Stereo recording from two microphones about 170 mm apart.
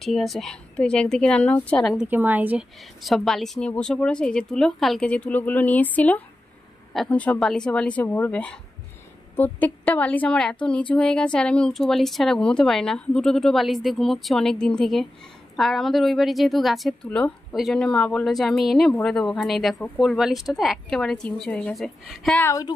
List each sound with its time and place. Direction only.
0.0 s a woman's voice: centre (ahead or behind)
2.0 s a woman's voice: 10° right (ahead or behind)
22.4 s speech: 15° left (ahead or behind)